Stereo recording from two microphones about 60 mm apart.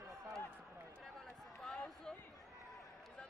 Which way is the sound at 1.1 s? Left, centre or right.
Centre.